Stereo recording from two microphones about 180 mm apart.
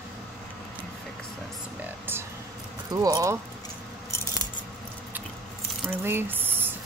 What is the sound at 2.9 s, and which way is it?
Speech, 20° right (ahead or behind).